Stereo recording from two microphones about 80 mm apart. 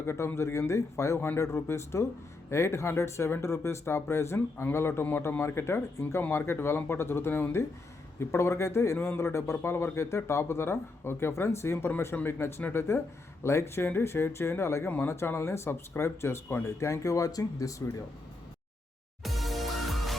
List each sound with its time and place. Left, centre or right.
0.0 s a man's voice: left
19.2 s music: centre